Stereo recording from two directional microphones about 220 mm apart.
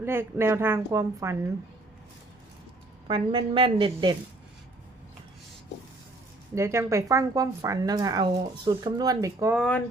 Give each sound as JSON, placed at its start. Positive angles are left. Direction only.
{"t": 0.0, "sound": "speech", "side_deg": -10}
{"t": 3.1, "sound": "a woman's voice", "side_deg": -20}
{"t": 6.5, "sound": "speech", "side_deg": -15}
{"t": 9.6, "sound": "speech", "side_deg": 5}